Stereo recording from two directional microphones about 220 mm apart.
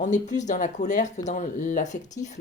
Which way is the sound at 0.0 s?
35° left (ahead or behind).